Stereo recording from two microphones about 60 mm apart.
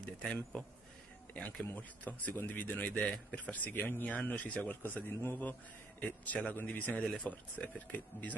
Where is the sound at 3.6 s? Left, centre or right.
Left.